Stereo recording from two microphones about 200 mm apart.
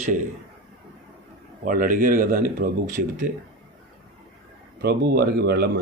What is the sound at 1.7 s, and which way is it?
Speech, 40° right (ahead or behind).